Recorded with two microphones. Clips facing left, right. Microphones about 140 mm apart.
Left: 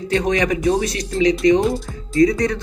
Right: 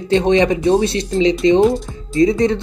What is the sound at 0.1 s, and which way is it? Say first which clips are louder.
Speech: right 5 dB; 25° right (ahead or behind).